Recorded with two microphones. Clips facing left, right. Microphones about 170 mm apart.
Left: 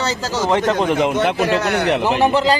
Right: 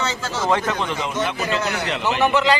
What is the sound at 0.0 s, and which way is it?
Speech, 35° left (ahead or behind).